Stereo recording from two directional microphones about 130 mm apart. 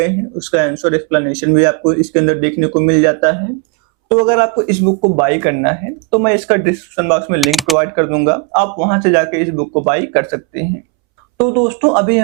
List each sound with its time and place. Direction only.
0.5 s speech: 15° right (ahead or behind)
7.3 s speech: centre (ahead or behind)
7.8 s speech: 15° right (ahead or behind)